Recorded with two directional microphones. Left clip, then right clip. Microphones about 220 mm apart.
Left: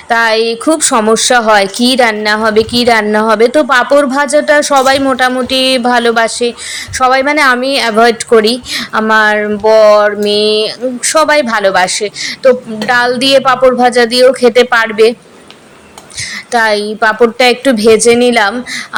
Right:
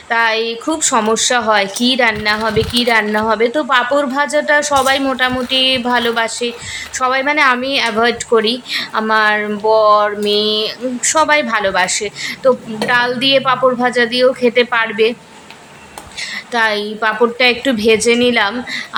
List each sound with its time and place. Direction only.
0.1 s a woman's voice: 25° left (ahead or behind)
16.5 s a woman's voice: 20° left (ahead or behind)